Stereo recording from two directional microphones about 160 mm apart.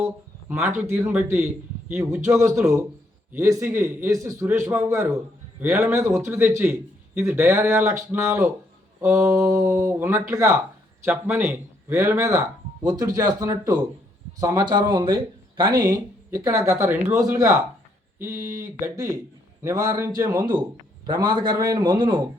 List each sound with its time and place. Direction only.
0.0 s a man's voice: 15° right (ahead or behind)